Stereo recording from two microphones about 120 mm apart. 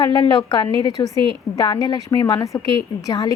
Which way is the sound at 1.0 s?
25° left (ahead or behind).